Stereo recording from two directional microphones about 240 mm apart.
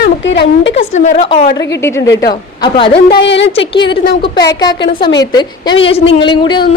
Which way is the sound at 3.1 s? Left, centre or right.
Left.